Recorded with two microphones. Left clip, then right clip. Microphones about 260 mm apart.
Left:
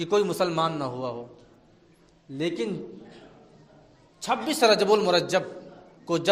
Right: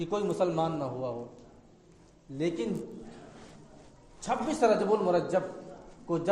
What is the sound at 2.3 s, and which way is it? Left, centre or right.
Speech, left.